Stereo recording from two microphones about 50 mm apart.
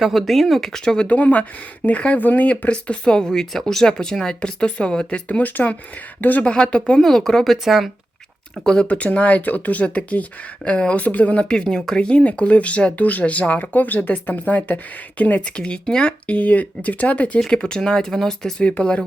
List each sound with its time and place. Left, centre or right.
0.0 s speech: centre
1.0 s speech: left
5.4 s speech: left
6.4 s speech: centre
7.0 s speech: centre
7.5 s speech: centre
8.6 s speech: centre
8.9 s speech: left
11.4 s speech: centre
17.4 s speech: centre